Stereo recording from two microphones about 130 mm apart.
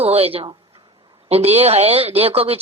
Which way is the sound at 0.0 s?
50° right (ahead or behind).